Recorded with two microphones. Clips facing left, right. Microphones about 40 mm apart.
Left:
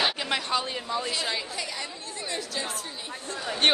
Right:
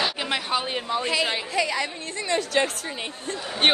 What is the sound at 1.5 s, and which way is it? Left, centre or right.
Speech, right.